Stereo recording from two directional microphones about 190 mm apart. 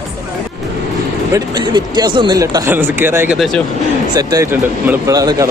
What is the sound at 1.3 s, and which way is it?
Speech, 20° right (ahead or behind).